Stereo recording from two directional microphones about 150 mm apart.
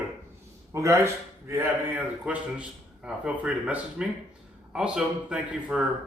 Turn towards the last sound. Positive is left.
turn(degrees=-5)  # may be behind; listen again after turning